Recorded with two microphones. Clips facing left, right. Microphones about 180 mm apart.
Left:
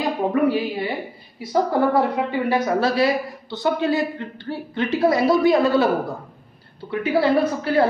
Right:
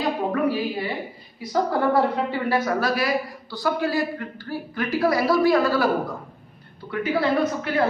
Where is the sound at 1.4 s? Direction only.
25° left (ahead or behind).